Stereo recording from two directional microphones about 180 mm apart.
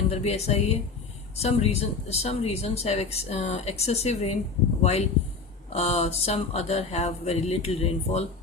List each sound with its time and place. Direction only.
0.1 s speech: 35° left (ahead or behind)